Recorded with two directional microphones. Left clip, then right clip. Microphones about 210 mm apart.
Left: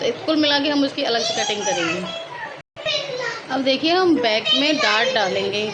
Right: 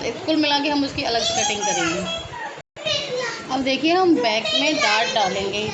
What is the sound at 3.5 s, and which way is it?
A woman's voice, 15° left (ahead or behind).